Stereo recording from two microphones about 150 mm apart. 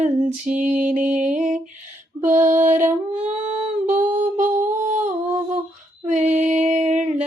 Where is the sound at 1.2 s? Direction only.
55° right (ahead or behind).